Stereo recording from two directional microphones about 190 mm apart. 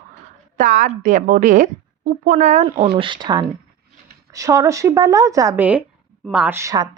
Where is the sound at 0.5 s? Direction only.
45° right (ahead or behind).